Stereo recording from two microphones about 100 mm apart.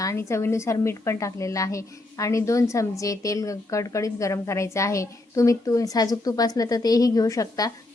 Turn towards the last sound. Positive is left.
turn(degrees=35)  # may be behind; listen again after turning